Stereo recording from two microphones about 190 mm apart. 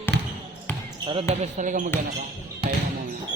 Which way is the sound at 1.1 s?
30° right (ahead or behind).